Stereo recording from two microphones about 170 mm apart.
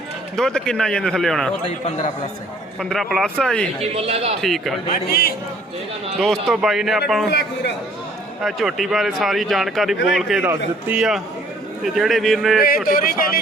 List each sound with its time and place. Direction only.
0.3 s speech: 5° left (ahead or behind)
2.9 s speech: centre (ahead or behind)
3.8 s a man's voice: 35° right (ahead or behind)
4.4 s speech: centre (ahead or behind)
4.9 s speech: 65° left (ahead or behind)
6.1 s speech: centre (ahead or behind)
7.3 s a man's voice: 80° left
8.4 s speech: centre (ahead or behind)
12.5 s speech: 60° left (ahead or behind)